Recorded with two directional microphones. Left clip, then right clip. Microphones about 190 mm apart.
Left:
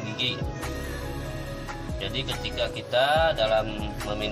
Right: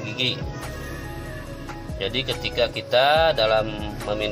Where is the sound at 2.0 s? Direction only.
15° right (ahead or behind).